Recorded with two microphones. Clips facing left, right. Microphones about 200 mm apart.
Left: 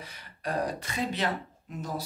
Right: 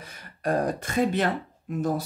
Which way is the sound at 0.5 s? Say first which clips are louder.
Right 6 dB; 50° right (ahead or behind).